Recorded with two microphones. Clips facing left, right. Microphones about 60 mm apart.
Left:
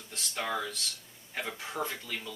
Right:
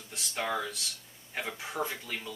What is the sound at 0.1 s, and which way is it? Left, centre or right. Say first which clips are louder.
A man's voice: right 1 dB; centre.